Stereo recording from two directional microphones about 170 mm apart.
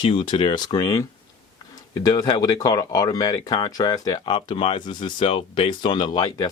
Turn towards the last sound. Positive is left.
turn(degrees=25)  # may be behind; listen again after turning